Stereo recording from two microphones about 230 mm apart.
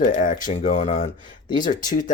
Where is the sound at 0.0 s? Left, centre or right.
Left.